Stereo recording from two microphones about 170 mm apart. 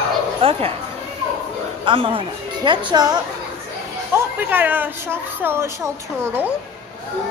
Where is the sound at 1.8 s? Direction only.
30° right (ahead or behind).